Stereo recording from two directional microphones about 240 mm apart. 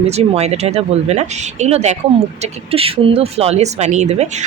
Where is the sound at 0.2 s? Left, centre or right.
Right.